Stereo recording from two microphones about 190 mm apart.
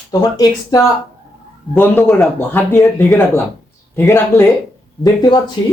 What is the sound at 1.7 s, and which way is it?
Speech, 10° left (ahead or behind).